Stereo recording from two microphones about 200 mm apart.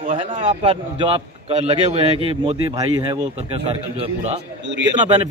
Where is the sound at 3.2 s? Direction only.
30° right (ahead or behind).